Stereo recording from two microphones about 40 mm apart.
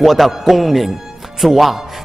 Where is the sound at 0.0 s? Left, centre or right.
Centre.